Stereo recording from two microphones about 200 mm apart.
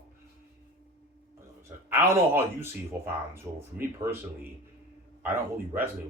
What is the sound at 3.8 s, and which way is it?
Speech, 10° right (ahead or behind).